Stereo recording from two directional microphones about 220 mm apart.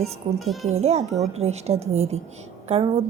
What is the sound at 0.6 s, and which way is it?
A woman's voice, 30° right (ahead or behind).